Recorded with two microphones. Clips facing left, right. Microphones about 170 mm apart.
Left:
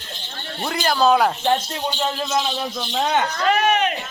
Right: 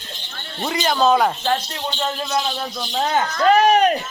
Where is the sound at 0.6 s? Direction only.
5° left (ahead or behind).